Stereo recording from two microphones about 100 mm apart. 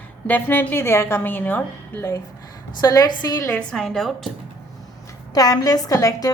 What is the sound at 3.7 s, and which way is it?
Speech, 5° left (ahead or behind).